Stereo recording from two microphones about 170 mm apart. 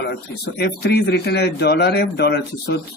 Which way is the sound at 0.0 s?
75° left (ahead or behind).